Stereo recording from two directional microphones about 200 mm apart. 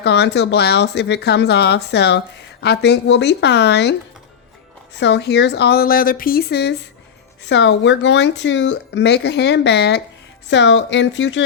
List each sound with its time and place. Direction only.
0.0 s a woman's voice: 55° left (ahead or behind)
4.9 s a woman's voice: 60° left (ahead or behind)